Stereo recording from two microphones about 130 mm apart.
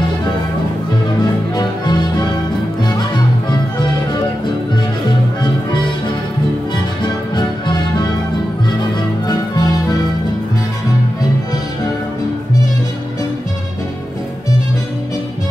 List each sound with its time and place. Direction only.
1.5 s music: 30° left (ahead or behind)
7.0 s music: 35° left (ahead or behind)
9.3 s music: 30° left (ahead or behind)